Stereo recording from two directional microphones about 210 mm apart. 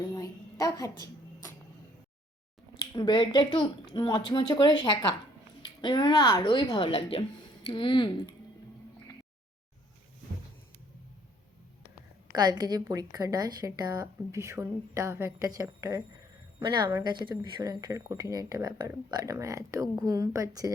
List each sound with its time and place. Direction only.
0.1 s a sound: 15° left (ahead or behind)
2.9 s a woman's voice: 20° left (ahead or behind)
12.3 s a woman's voice: 20° right (ahead or behind)